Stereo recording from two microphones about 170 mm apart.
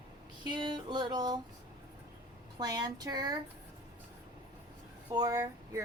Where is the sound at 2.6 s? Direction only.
25° right (ahead or behind).